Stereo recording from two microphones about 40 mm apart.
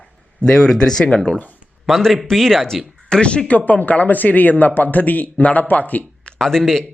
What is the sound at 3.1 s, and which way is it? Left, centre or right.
Speech, left.